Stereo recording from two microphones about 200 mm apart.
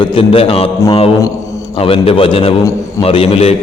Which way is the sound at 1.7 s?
30° left (ahead or behind).